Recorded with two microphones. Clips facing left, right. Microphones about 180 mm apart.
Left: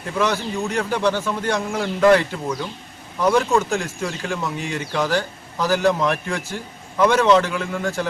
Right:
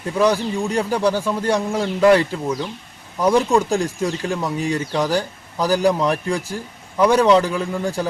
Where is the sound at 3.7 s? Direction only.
35° right (ahead or behind).